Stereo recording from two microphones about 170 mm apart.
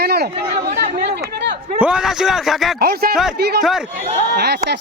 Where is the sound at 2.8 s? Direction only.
65° right (ahead or behind).